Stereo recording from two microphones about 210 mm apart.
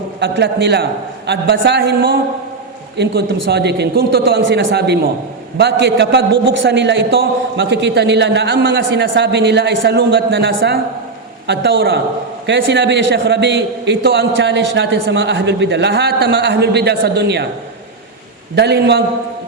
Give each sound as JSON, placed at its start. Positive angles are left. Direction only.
{"t": 0.2, "sound": "a man's voice", "side_deg": -55}
{"t": 18.5, "sound": "a man's voice", "side_deg": -50}